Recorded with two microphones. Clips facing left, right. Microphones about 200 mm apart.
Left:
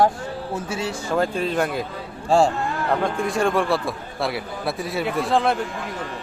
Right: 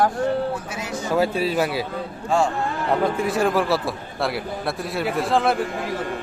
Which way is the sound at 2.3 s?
30° left (ahead or behind).